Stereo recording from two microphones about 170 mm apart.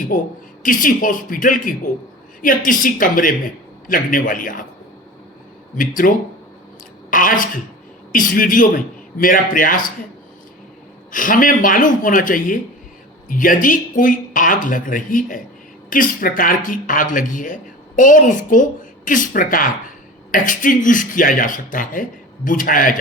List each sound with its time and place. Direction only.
0.1 s speech: 50° left (ahead or behind)
5.7 s a woman's voice: 55° left (ahead or behind)
11.1 s speech: 50° left (ahead or behind)